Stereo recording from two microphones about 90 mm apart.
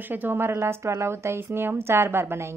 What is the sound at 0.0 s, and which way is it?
A woman's voice, 20° right (ahead or behind).